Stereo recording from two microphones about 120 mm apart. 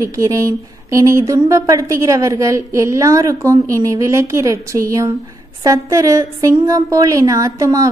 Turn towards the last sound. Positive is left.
turn(degrees=-25)  # may be behind; listen again after turning